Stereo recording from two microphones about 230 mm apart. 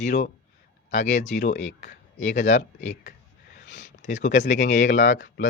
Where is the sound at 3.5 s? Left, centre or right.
Left.